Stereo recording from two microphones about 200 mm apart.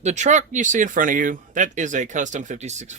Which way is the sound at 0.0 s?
35° right (ahead or behind).